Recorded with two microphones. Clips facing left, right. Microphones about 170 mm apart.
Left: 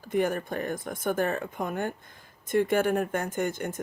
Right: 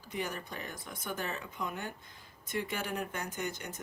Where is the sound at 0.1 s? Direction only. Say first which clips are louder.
Left 12 dB; 50° left (ahead or behind).